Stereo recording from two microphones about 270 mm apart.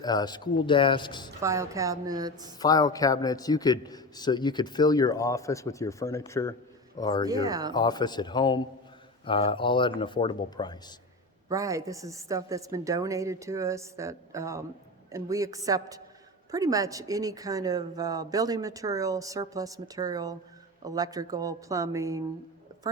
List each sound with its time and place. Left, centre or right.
0.0 s a man's voice: centre
1.4 s speech: centre
2.6 s a man's voice: centre
7.3 s speech: centre
7.7 s a man's voice: centre
11.4 s speech: centre
22.7 s a sound: centre